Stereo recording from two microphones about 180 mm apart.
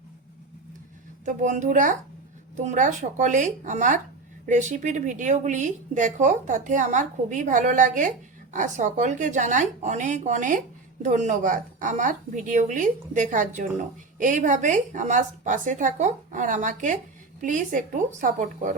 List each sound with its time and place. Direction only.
1.2 s a woman's voice: 45° right (ahead or behind)